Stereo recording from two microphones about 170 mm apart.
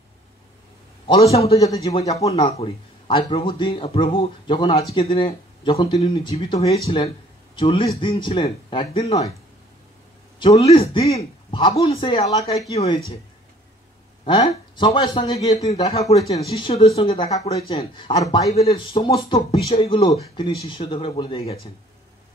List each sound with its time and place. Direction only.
1.0 s speech: 35° left (ahead or behind)
10.6 s speech: 35° left (ahead or behind)
14.2 s speech: 30° left (ahead or behind)
18.2 s speech: 20° left (ahead or behind)
18.5 s speech: 35° left (ahead or behind)